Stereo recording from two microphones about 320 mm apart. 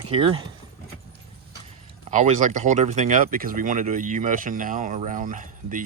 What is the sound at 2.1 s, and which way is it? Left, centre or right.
Speech, right.